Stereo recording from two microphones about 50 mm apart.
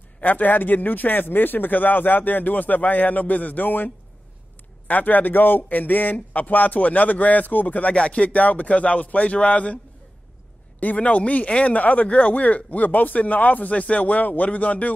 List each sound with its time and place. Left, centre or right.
0.2 s speech: left
10.8 s speech: left